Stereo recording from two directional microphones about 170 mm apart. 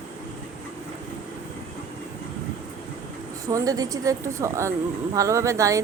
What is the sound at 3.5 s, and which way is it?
A woman's voice, 20° right (ahead or behind).